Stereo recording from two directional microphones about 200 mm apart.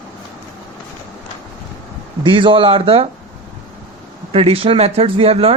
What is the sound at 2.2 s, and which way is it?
Speech, 25° right (ahead or behind).